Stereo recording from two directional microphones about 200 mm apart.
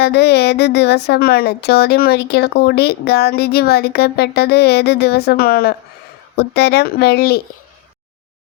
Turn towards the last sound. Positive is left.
turn(degrees=55)  # may be behind; listen again after turning